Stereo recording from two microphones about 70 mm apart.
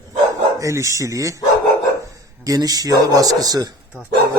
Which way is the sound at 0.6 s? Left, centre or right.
Right.